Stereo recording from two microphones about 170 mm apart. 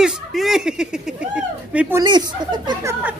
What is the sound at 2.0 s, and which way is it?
Speech, 25° right (ahead or behind).